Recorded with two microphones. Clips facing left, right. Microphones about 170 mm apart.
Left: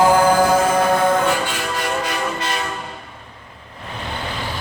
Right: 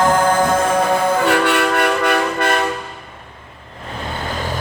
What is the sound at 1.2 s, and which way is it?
Vehicle, 65° right (ahead or behind).